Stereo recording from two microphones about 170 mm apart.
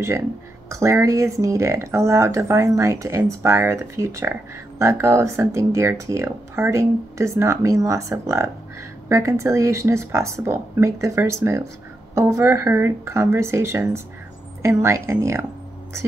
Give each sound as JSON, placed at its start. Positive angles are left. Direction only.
{"t": 0.7, "sound": "speech", "side_deg": -15}